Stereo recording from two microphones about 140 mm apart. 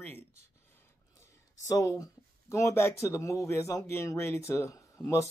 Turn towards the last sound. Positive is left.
turn(degrees=20)  # may be behind; listen again after turning